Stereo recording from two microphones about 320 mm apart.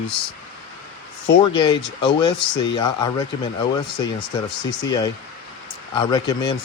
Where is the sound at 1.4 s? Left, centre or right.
Centre.